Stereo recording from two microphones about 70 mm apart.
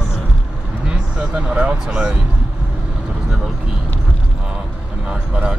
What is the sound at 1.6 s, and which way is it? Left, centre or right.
Speech, centre.